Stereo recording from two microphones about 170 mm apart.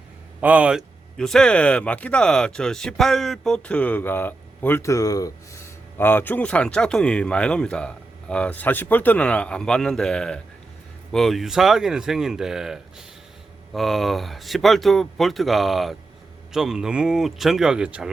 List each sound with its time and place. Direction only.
0.4 s speech: 10° right (ahead or behind)